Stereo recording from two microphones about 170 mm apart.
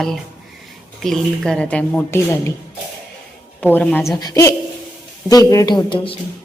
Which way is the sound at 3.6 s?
10° left (ahead or behind).